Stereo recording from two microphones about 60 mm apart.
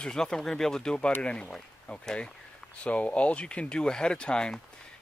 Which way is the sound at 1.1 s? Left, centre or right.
Left.